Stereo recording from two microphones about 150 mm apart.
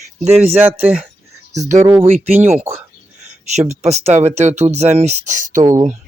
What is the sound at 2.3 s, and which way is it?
Speech, 15° right (ahead or behind).